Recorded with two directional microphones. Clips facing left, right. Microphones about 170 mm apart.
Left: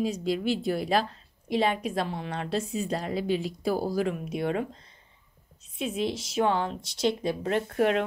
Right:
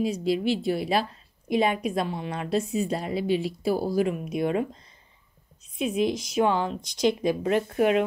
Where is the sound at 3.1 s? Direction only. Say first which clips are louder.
Right 2 dB; 40° left (ahead or behind).